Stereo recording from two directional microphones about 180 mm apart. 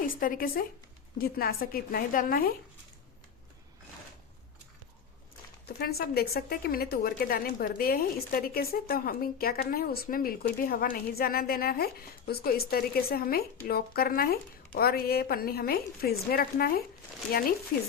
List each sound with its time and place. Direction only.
0.0 s a woman's voice: 50° left (ahead or behind)
5.6 s a woman's voice: 60° left (ahead or behind)